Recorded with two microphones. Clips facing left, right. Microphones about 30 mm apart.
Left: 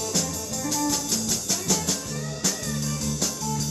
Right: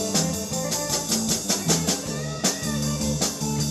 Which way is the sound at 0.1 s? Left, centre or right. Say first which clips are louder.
Right 3 dB; centre.